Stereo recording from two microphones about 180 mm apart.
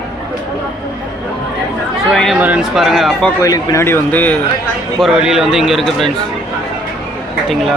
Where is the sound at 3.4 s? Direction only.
20° left (ahead or behind).